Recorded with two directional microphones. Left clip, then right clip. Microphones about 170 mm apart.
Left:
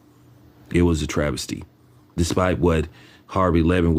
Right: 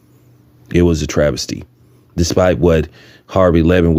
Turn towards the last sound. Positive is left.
turn(degrees=-35)  # may be behind; listen again after turning